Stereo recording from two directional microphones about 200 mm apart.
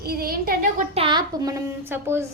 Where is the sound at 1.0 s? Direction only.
25° right (ahead or behind).